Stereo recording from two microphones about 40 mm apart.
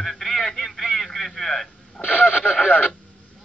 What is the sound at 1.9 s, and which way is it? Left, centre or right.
Speech, left.